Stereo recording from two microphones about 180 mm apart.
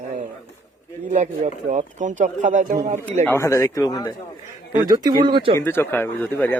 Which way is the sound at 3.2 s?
15° left (ahead or behind).